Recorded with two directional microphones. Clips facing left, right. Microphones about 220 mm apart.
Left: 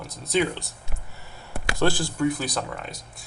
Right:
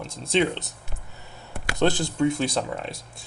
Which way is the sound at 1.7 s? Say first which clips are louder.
Right 2 dB; 20° right (ahead or behind).